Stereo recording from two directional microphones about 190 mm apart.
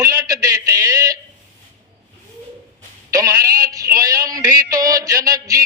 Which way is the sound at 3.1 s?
15° right (ahead or behind).